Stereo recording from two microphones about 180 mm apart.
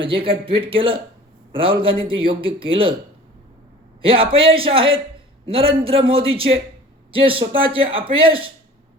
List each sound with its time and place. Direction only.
0.0 s speech: 30° right (ahead or behind)
4.0 s a man's voice: 30° right (ahead or behind)